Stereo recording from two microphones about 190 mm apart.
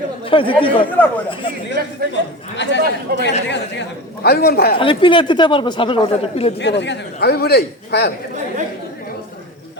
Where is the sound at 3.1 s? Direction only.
55° right (ahead or behind).